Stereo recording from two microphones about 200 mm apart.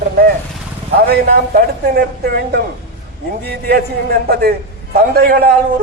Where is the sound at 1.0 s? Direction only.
50° right (ahead or behind).